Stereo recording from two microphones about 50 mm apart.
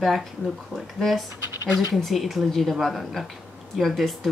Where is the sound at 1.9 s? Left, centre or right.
Centre.